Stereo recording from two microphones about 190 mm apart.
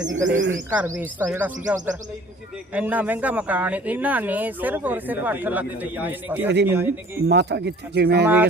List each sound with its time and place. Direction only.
0.0 s speech: 80° right
0.7 s a man's voice: 10° right (ahead or behind)
7.3 s speech: 65° right (ahead or behind)